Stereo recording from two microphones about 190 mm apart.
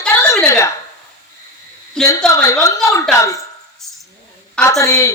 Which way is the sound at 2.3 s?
15° left (ahead or behind).